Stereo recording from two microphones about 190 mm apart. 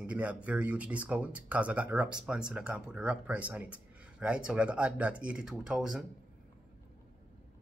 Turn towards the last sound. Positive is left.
turn(degrees=0)  # may be behind; listen again after turning